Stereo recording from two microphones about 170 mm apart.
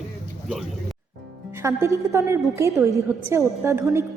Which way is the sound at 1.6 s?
15° right (ahead or behind).